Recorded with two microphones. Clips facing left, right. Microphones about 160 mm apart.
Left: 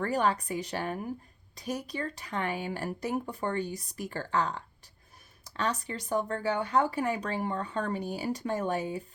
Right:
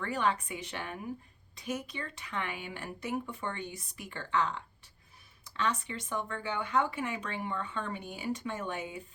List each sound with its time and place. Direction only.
0.0 s speech: 40° left (ahead or behind)